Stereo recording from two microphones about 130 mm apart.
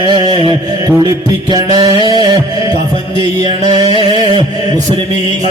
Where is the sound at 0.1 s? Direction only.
40° right (ahead or behind).